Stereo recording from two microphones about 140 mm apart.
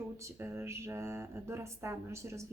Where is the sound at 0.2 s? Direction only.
15° right (ahead or behind).